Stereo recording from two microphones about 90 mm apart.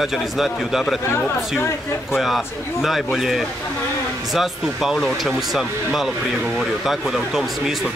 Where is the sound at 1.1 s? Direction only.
25° left (ahead or behind).